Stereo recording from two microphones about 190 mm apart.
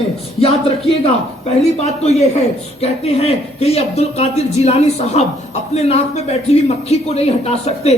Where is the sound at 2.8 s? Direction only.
35° left (ahead or behind).